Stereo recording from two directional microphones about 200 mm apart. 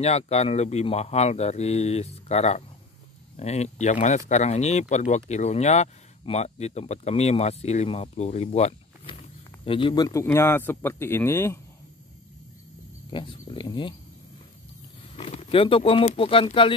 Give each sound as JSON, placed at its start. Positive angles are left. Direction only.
{"t": 0.0, "sound": "speech", "side_deg": 30}
{"t": 13.1, "sound": "speech", "side_deg": 25}
{"t": 15.1, "sound": "speech", "side_deg": 30}